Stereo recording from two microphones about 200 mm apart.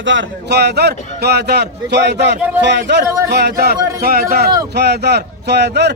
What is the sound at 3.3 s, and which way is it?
A man's voice, 55° right (ahead or behind).